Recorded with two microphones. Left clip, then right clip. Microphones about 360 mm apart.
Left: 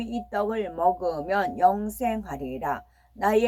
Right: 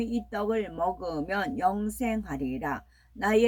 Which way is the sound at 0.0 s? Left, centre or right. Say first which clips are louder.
Left 3 dB; centre.